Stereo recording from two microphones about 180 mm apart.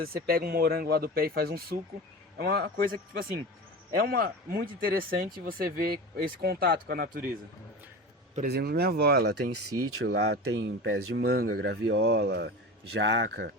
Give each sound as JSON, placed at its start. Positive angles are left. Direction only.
{"t": 0.3, "sound": "speech", "side_deg": -55}
{"t": 8.4, "sound": "speech", "side_deg": -65}
{"t": 12.9, "sound": "speech", "side_deg": -80}